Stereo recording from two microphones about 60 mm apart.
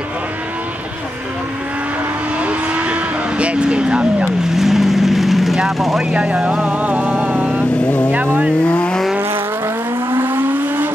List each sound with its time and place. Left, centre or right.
2.4 s vehicle: centre
4.6 s vehicle: centre
6.1 s vehicle: centre
7.7 s vehicle: centre
8.1 s vehicle: right
8.6 s vehicle: centre
10.1 s vehicle: right